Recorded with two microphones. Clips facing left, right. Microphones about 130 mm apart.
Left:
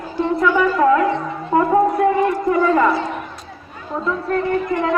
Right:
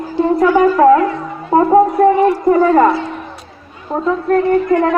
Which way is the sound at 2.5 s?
40° right (ahead or behind).